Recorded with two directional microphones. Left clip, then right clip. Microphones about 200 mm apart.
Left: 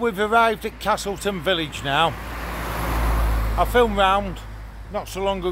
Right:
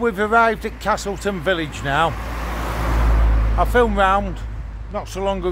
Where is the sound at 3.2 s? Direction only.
55° left (ahead or behind).